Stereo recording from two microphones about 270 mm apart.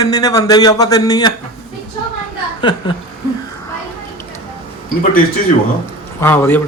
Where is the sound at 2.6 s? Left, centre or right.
Centre.